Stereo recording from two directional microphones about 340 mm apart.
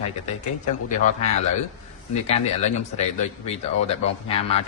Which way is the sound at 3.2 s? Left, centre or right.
Centre.